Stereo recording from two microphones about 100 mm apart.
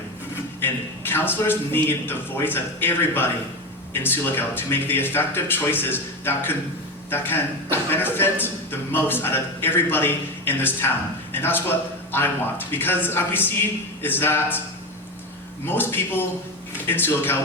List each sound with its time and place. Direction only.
0.6 s a man's voice: 20° left (ahead or behind)
15.6 s a man's voice: 20° left (ahead or behind)